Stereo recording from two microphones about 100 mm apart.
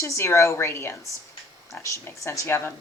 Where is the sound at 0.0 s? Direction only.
30° left (ahead or behind).